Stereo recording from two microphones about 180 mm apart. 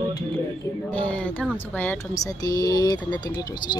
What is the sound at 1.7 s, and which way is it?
Speech, 10° left (ahead or behind).